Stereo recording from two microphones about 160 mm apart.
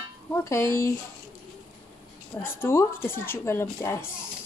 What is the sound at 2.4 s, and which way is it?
Speech, 15° left (ahead or behind).